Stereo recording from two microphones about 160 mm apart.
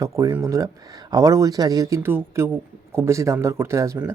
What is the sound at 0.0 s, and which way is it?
Speech, 20° right (ahead or behind).